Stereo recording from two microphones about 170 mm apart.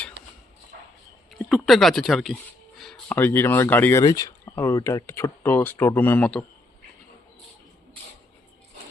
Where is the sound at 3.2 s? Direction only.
15° left (ahead or behind).